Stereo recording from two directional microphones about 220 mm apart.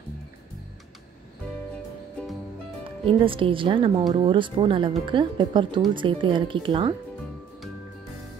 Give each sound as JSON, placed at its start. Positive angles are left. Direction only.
{"t": 3.1, "sound": "speech", "side_deg": -25}